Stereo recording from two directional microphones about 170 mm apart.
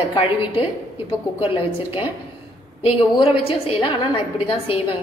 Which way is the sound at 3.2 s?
30° left (ahead or behind).